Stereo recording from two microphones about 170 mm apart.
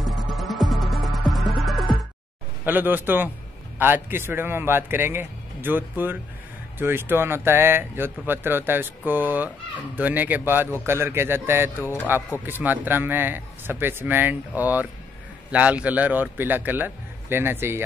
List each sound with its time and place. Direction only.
0.4 s music: centre (ahead or behind)
2.6 s speech: 10° right (ahead or behind)